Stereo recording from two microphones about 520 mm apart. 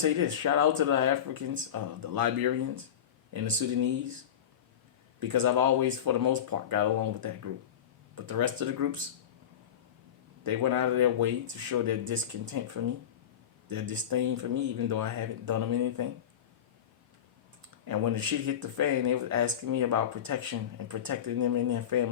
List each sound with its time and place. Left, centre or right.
0.0 s speech: right
5.3 s speech: right
10.5 s speech: right
17.8 s speech: right